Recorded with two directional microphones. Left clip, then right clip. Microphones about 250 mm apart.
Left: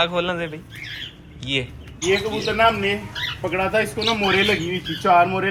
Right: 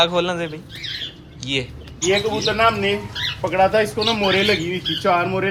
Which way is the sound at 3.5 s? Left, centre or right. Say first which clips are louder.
Right 5 dB; centre.